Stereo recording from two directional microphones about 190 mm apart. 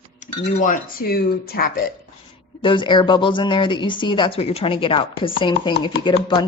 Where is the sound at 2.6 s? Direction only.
25° left (ahead or behind).